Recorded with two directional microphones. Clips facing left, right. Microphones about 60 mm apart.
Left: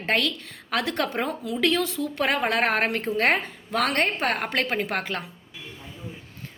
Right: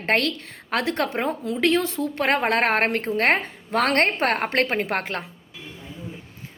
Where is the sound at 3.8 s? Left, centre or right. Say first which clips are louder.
Right 3 dB; right.